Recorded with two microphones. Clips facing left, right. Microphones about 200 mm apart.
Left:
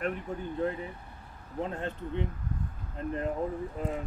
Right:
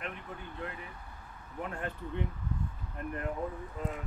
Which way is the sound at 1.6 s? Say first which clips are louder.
Left 4 dB; 25° left (ahead or behind).